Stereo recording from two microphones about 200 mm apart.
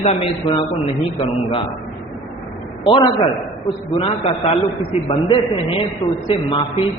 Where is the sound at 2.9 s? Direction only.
20° left (ahead or behind).